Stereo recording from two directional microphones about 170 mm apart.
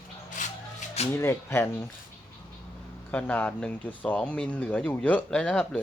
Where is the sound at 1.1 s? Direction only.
15° left (ahead or behind).